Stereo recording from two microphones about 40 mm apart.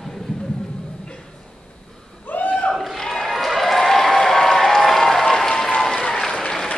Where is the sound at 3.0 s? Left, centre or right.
Centre.